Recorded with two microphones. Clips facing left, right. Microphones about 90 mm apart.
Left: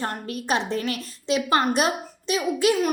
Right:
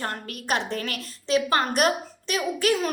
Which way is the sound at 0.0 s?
25° left (ahead or behind).